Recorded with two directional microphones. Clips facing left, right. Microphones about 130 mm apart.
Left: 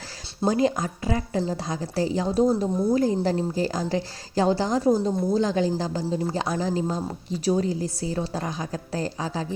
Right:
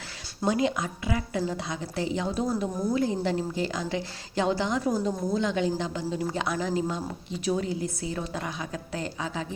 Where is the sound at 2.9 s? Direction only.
40° left (ahead or behind).